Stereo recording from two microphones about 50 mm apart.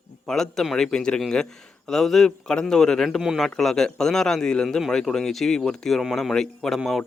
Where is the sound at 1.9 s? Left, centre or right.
Centre.